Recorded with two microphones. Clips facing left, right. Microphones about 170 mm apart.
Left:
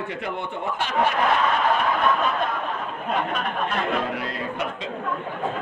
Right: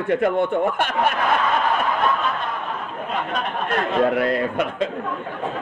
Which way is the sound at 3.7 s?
55° right (ahead or behind).